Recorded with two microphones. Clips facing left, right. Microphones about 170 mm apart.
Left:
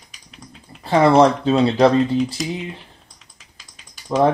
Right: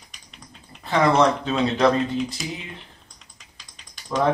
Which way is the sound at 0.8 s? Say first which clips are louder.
Left 5 dB; 30° left (ahead or behind).